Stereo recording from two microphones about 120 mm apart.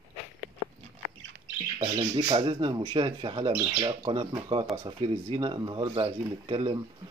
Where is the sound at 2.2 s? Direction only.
45° right (ahead or behind).